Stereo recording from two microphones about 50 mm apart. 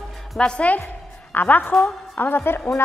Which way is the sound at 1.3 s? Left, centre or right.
Left.